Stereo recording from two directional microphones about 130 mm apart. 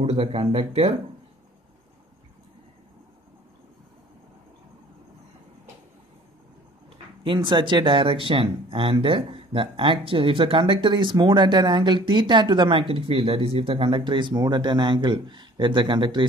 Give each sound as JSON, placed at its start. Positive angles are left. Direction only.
{"t": 0.0, "sound": "speech", "side_deg": -50}
{"t": 7.2, "sound": "speech", "side_deg": -40}